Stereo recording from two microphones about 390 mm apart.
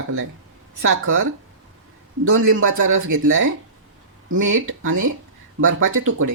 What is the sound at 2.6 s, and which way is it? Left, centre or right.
Speech, right.